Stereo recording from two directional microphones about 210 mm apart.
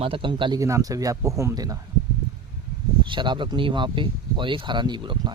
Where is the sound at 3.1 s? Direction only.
20° right (ahead or behind).